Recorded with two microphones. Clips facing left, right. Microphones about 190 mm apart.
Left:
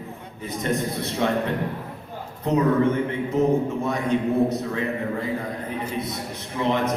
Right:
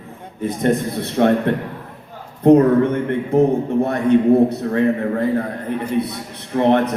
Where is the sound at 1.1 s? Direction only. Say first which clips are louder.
Right 8 dB; 55° right (ahead or behind).